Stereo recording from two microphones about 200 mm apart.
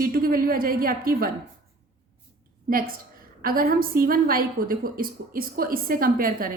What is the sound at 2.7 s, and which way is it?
A woman's voice, 45° right (ahead or behind).